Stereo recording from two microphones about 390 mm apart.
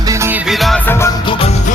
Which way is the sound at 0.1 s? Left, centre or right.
Centre.